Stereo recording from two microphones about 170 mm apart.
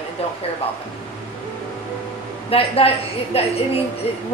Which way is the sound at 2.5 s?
35° left (ahead or behind).